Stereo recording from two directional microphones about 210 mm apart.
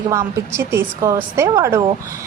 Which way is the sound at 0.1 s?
15° right (ahead or behind).